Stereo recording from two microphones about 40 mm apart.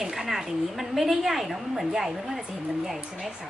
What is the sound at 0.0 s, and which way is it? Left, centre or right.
A woman's voice, centre.